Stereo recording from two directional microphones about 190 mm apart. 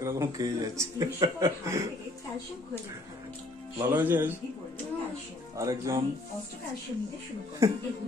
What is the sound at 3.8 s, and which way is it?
Speech, 10° right (ahead or behind).